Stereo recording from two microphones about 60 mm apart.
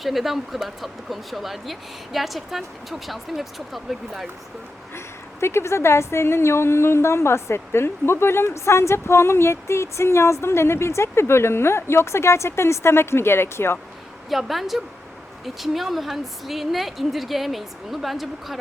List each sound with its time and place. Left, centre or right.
0.0 s speech: centre
4.9 s a woman's voice: left
14.3 s speech: centre